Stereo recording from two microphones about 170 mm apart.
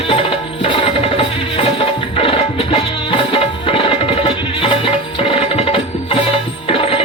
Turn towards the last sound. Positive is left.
turn(degrees=35)  # may be behind; listen again after turning